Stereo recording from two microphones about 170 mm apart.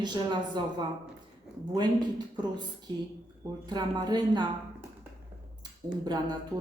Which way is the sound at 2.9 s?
25° right (ahead or behind).